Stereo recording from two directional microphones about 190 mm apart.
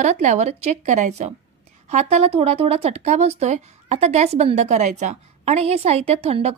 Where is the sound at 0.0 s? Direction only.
40° right (ahead or behind).